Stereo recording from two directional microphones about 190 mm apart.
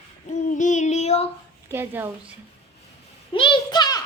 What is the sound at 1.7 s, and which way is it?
Speech, 10° right (ahead or behind).